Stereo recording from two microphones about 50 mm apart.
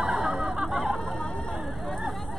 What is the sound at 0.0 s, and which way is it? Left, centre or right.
Snicker, centre.